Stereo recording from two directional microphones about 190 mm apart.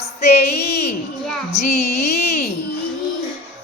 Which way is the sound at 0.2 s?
35° left (ahead or behind).